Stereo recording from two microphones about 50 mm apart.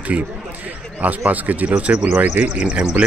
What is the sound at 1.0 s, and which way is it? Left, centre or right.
A man's voice, right.